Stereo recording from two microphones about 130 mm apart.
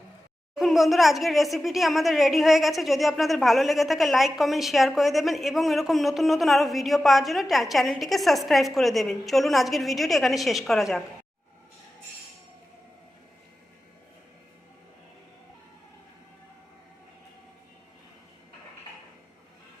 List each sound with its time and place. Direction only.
0.5 s speech: centre (ahead or behind)